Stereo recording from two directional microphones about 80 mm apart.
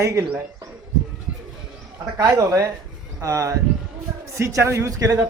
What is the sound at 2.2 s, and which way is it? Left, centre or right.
A man's voice, right.